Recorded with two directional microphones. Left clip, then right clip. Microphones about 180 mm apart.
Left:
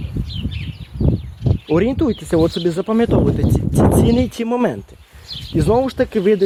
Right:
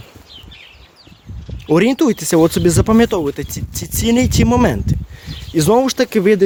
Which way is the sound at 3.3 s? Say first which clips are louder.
Left 9 dB; 10° right (ahead or behind).